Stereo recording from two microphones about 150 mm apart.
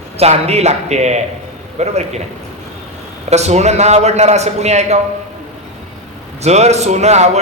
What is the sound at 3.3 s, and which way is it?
A man's voice, 50° right (ahead or behind).